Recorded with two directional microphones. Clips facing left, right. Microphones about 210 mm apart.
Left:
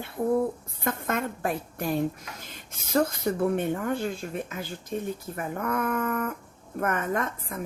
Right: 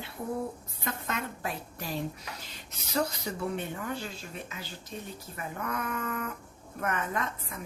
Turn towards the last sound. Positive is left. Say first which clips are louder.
# left 5 dB
turn(degrees=50)  # may be behind; listen again after turning